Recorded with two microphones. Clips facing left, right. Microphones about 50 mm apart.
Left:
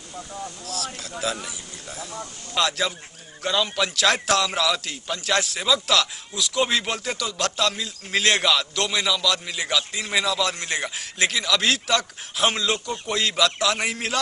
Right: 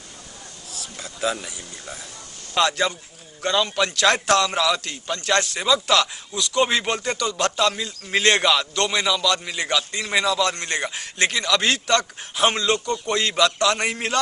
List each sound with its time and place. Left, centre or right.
0.7 s speech: left
1.2 s a man's voice: centre